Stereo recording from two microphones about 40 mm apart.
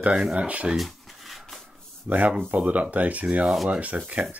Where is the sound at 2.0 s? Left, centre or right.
Right.